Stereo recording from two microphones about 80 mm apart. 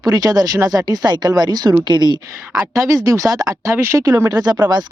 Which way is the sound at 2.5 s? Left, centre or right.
Right.